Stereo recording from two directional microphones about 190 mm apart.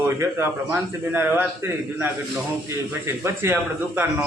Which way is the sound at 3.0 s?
15° right (ahead or behind).